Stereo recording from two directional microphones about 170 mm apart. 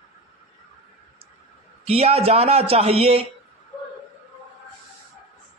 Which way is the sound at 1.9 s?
35° right (ahead or behind).